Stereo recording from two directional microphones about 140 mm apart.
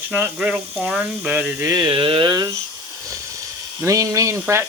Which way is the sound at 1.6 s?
25° right (ahead or behind).